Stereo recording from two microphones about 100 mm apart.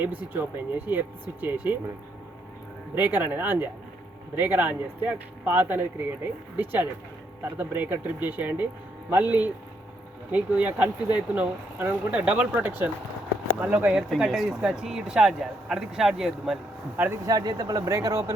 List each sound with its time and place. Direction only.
0.3 s speech: 20° right (ahead or behind)
2.9 s speech: 20° right (ahead or behind)
17.2 s speech: 40° right (ahead or behind)